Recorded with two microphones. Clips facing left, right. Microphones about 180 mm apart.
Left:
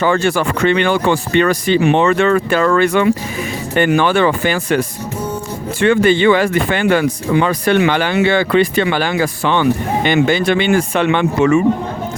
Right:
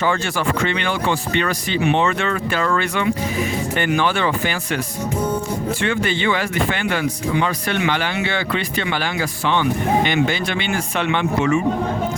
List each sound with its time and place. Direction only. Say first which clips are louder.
0.0 s speech: left 6 dB; 55° left (ahead or behind)
5.8 s speech: left 12 dB; 55° left (ahead or behind)